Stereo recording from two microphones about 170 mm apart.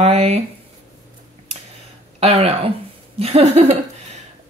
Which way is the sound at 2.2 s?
35° right (ahead or behind).